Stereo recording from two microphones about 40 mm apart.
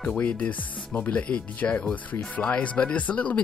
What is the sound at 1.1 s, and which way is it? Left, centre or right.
Speech, left.